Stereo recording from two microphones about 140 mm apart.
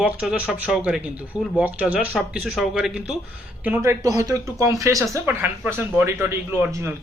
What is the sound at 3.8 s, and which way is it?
Speech, 25° right (ahead or behind).